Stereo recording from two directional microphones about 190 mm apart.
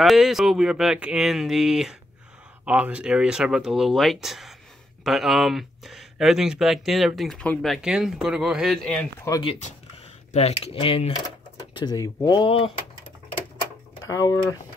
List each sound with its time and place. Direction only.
0.0 s speech: centre (ahead or behind)
9.4 s speech: 30° left (ahead or behind)
14.0 s speech: 15° left (ahead or behind)